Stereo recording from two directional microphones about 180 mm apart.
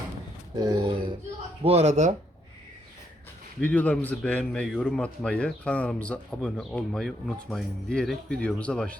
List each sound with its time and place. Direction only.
0.5 s a sound: 20° right (ahead or behind)
1.6 s speech: 35° right (ahead or behind)
3.6 s speech: 10° left (ahead or behind)